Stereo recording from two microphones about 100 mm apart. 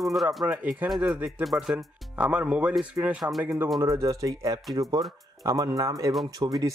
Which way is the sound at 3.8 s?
35° right (ahead or behind).